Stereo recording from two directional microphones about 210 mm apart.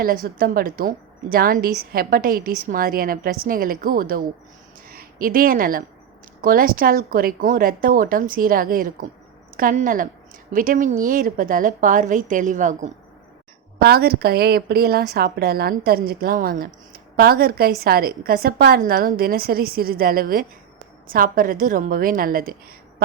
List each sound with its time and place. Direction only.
0.0 s a woman's voice: 45° right (ahead or behind)
13.7 s a woman's voice: 45° right (ahead or behind)